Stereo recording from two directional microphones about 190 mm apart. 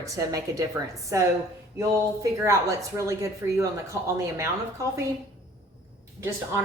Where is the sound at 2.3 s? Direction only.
15° right (ahead or behind).